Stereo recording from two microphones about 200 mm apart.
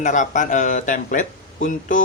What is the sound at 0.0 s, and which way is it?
Speech, 40° left (ahead or behind).